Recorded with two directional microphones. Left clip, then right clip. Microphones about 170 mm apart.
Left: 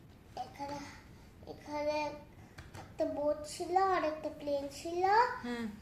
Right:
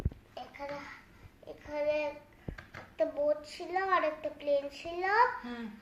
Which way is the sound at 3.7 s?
25° left (ahead or behind).